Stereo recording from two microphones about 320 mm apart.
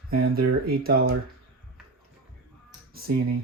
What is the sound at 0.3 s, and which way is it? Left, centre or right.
Speech, right.